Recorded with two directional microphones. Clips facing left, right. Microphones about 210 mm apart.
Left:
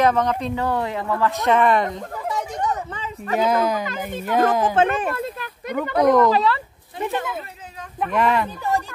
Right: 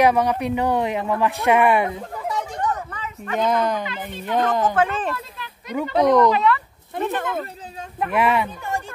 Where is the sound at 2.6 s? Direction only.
25° left (ahead or behind).